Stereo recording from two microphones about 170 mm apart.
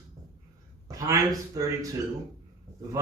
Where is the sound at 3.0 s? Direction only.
20° right (ahead or behind).